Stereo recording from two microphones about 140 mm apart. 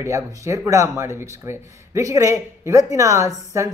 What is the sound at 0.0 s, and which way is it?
Speech, 20° right (ahead or behind).